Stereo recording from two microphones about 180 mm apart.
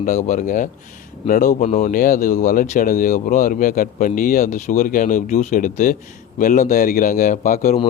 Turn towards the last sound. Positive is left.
turn(degrees=45)  # may be behind; listen again after turning